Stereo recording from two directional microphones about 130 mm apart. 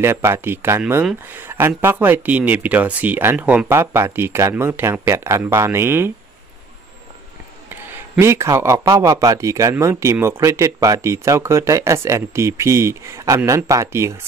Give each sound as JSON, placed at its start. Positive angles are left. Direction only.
{"t": 0.0, "sound": "speech", "side_deg": -20}
{"t": 7.7, "sound": "speech", "side_deg": -20}